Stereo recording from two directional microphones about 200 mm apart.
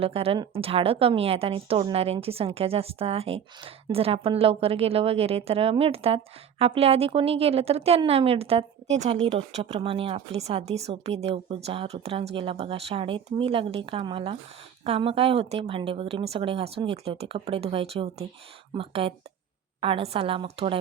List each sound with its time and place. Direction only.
0.0 s a woman's voice: 30° right (ahead or behind)